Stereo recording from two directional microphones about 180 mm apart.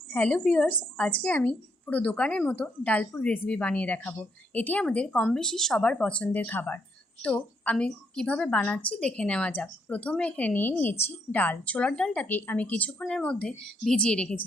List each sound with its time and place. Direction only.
0.1 s a woman's voice: 5° left (ahead or behind)